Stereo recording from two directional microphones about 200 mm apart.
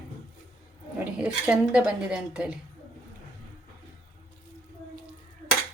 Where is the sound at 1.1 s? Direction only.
5° right (ahead or behind).